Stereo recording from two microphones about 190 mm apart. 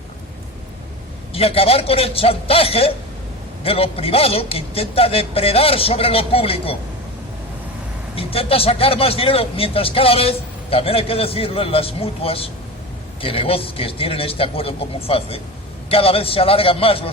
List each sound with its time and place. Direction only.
1.3 s a man's voice: 30° left (ahead or behind)
8.1 s speech: 30° left (ahead or behind)